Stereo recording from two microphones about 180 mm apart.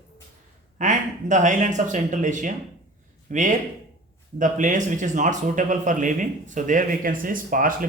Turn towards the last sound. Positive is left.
turn(degrees=-50)  # may be behind; listen again after turning